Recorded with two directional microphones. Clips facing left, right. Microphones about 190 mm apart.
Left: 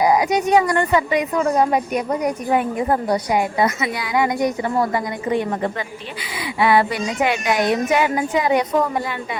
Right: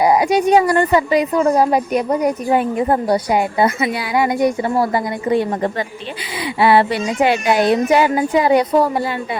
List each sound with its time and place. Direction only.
0.0 s a woman's voice: 30° right (ahead or behind)